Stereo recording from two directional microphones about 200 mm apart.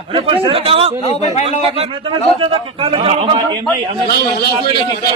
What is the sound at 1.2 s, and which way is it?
Speech, 30° left (ahead or behind).